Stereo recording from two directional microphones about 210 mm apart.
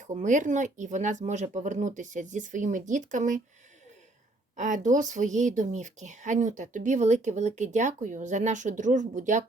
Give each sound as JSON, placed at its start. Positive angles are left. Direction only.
{"t": 0.0, "sound": "speech", "side_deg": -35}
{"t": 4.5, "sound": "speech", "side_deg": -35}